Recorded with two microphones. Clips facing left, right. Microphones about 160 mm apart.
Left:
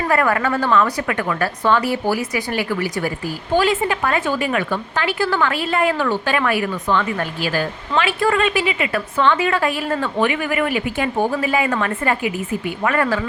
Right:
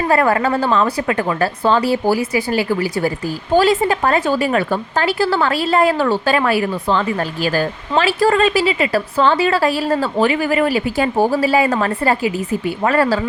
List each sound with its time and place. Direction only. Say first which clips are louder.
0.1 s a woman's voice: right 3 dB; 30° right (ahead or behind)